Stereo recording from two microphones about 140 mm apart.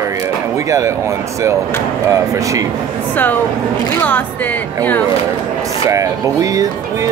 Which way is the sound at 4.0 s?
15° left (ahead or behind).